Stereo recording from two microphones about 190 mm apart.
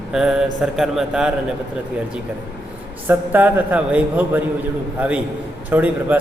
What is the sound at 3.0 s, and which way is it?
A man's voice, 10° right (ahead or behind).